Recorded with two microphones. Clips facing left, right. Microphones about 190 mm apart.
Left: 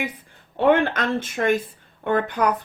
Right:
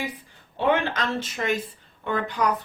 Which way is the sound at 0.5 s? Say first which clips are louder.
Left 5 dB; 55° left (ahead or behind).